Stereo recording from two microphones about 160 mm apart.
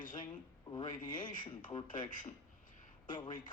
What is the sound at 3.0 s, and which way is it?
Speech, 30° left (ahead or behind).